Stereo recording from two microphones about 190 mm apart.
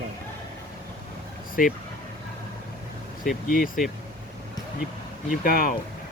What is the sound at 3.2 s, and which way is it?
Speech, 45° left (ahead or behind).